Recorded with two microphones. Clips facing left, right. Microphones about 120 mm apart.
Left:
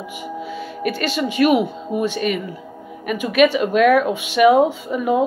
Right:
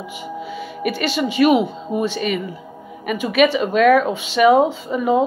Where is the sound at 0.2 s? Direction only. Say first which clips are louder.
Left 1 dB; 5° right (ahead or behind).